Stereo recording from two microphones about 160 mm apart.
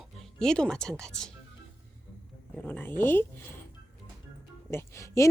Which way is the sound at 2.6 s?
10° left (ahead or behind).